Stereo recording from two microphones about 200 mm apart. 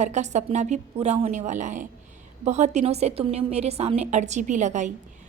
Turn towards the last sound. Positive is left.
turn(degrees=-35)  # may be behind; listen again after turning